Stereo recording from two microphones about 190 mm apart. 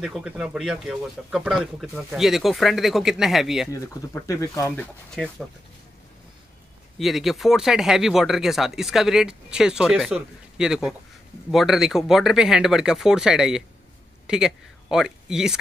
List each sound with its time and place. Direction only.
0.0 s speech: 5° right (ahead or behind)
3.7 s speech: 15° left (ahead or behind)
4.7 s speech: 5° left (ahead or behind)
7.0 s speech: centre (ahead or behind)